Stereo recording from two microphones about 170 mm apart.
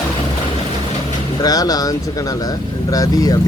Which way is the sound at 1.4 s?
20° left (ahead or behind).